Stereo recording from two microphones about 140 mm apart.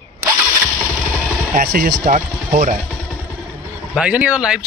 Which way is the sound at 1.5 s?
80° right.